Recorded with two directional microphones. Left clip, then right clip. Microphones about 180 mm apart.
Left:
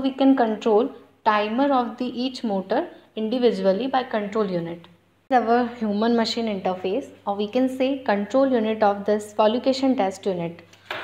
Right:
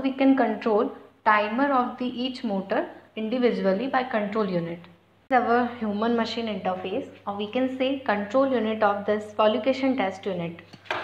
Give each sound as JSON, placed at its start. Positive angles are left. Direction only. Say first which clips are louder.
{"t": 0.0, "sound": "a woman's voice", "louder": "left 2 dB", "side_deg": 20}
{"t": 5.3, "sound": "a woman's voice", "louder": "left 2 dB", "side_deg": 40}